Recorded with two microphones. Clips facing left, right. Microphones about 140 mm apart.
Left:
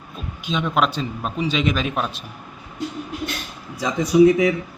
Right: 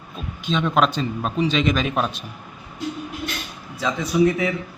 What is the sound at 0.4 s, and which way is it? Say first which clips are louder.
A man's voice: right 1 dB; 5° left (ahead or behind).